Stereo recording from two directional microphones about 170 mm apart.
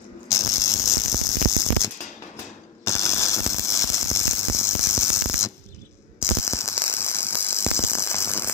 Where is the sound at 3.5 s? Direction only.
20° left (ahead or behind).